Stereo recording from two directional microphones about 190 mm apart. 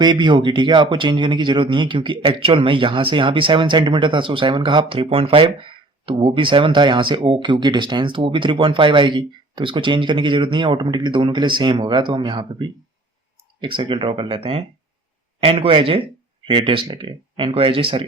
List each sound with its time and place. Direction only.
0.0 s speech: 25° right (ahead or behind)